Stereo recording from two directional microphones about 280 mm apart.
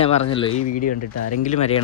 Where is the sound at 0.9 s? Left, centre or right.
Left.